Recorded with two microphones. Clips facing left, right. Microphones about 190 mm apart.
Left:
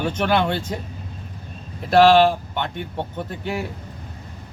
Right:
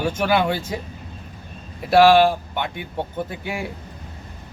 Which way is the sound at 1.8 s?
10° right (ahead or behind).